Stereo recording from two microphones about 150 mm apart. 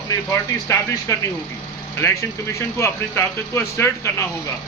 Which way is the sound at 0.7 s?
20° left (ahead or behind).